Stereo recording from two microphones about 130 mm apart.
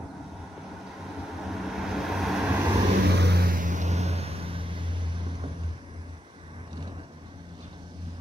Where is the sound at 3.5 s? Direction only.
85° right; by 5.2 s 35° right (ahead or behind).